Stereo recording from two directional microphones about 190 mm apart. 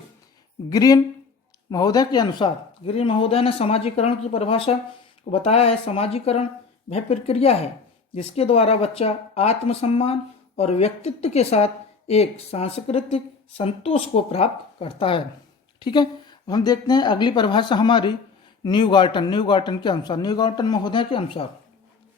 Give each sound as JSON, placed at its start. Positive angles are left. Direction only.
{"t": 0.7, "sound": "a woman's voice", "side_deg": 20}